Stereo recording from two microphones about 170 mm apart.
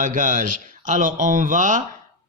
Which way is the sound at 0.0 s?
50° right (ahead or behind).